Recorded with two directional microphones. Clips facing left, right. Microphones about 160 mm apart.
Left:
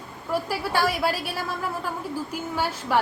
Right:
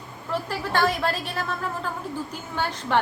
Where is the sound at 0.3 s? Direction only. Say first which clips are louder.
Left 2 dB; 10° left (ahead or behind).